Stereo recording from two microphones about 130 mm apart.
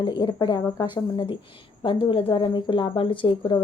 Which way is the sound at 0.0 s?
35° left (ahead or behind).